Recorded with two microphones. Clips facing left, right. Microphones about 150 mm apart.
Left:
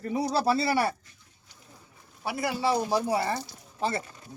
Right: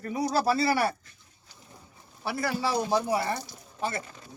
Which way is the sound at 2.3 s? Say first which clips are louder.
Left 1 dB; 20° left (ahead or behind).